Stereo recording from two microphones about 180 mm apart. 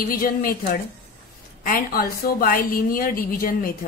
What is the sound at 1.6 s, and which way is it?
A woman's voice, 55° left (ahead or behind).